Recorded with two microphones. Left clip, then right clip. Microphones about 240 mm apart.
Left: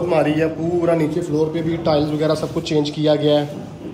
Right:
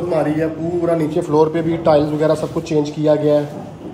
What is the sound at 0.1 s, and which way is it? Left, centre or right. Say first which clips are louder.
A man's voice: even; centre.